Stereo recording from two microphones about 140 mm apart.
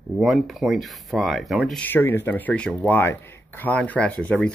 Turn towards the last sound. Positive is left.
turn(degrees=10)  # may be behind; listen again after turning